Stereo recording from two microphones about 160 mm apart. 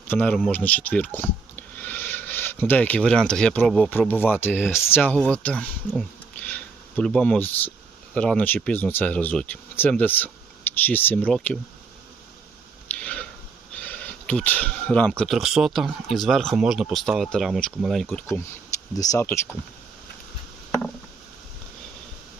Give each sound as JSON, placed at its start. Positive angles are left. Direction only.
{"t": 0.1, "sound": "speech", "side_deg": 10}
{"t": 12.9, "sound": "a sound", "side_deg": 10}
{"t": 13.7, "sound": "speech", "side_deg": 5}
{"t": 18.9, "sound": "speech", "side_deg": 20}